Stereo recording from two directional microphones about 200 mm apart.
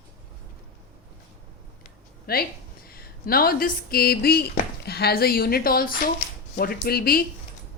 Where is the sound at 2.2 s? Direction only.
50° left (ahead or behind).